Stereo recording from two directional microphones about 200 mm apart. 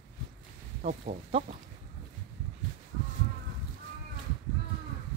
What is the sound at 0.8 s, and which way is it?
Speech, 40° right (ahead or behind).